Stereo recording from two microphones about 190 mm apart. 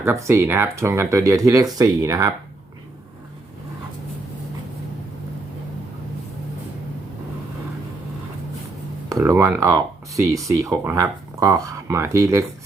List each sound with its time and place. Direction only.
0.0 s speech: 15° right (ahead or behind)
9.0 s speech: 15° right (ahead or behind)